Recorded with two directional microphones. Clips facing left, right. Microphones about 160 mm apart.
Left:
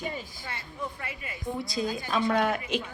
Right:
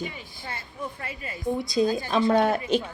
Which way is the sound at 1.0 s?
30° right (ahead or behind).